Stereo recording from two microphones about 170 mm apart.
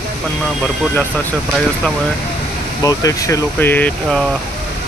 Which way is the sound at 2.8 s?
20° left (ahead or behind).